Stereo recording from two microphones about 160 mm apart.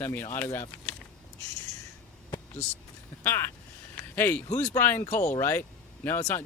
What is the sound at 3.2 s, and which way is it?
Speech, 15° left (ahead or behind).